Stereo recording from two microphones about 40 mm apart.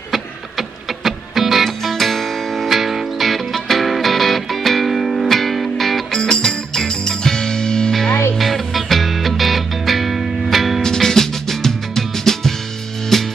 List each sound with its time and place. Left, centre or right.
0.1 s music: centre
6.1 s music: centre
8.4 s music: centre
10.8 s music: centre